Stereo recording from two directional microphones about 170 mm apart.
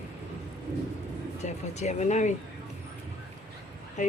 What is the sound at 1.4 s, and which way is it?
Speech, 40° left (ahead or behind).